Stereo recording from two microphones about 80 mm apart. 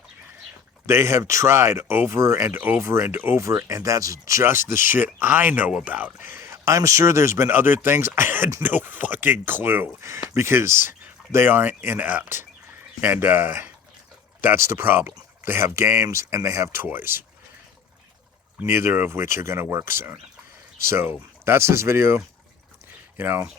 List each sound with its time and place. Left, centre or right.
0.9 s speech: right
16.8 s speech: right
18.7 s speech: right
22.9 s a sound: right